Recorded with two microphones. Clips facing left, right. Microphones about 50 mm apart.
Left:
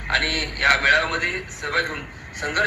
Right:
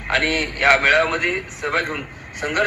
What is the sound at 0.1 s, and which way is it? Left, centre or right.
A man's voice, right.